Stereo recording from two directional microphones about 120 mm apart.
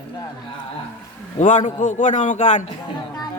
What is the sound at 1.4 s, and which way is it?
A man's voice, 90° left.